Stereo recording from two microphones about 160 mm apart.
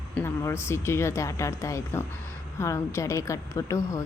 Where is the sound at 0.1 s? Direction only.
15° left (ahead or behind).